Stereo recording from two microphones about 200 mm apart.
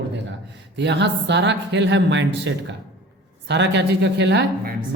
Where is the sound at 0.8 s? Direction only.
60° right (ahead or behind).